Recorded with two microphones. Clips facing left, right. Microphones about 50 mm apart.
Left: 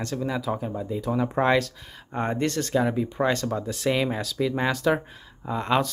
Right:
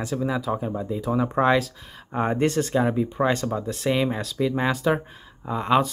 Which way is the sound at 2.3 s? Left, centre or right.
Centre.